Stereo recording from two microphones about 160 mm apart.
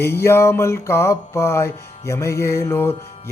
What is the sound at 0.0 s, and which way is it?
Music, 15° left (ahead or behind).